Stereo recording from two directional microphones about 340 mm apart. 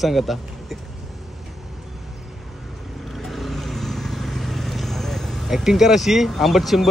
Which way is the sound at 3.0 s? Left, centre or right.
Centre.